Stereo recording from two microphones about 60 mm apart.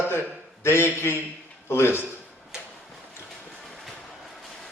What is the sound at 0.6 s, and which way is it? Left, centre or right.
A man's voice, left.